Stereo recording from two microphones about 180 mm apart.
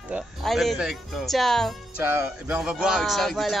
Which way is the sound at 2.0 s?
10° right (ahead or behind).